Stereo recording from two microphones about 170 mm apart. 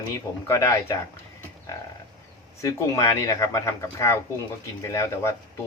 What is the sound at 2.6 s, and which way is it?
Speech, 20° left (ahead or behind).